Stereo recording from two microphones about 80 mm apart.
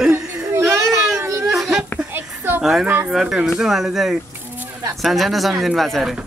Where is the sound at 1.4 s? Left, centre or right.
Centre.